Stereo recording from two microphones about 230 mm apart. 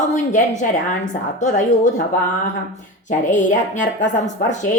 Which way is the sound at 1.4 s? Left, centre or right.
Left.